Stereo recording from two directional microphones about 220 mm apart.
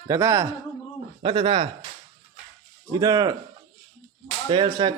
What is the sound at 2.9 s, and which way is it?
Speech, 15° right (ahead or behind).